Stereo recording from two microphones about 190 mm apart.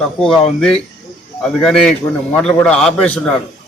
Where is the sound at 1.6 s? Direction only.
5° left (ahead or behind).